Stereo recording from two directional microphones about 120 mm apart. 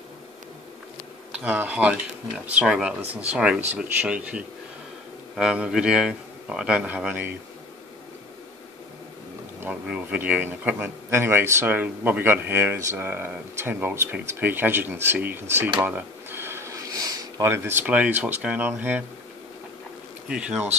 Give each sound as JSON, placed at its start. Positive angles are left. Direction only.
{"t": 1.3, "sound": "a man's voice", "side_deg": -10}
{"t": 9.6, "sound": "a man's voice", "side_deg": -10}
{"t": 20.2, "sound": "a man's voice", "side_deg": -5}